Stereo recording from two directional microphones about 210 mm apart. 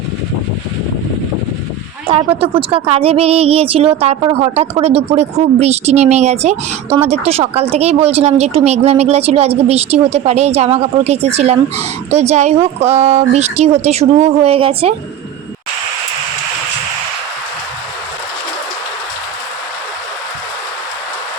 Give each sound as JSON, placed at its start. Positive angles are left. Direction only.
{"t": 2.1, "sound": "speech", "side_deg": -25}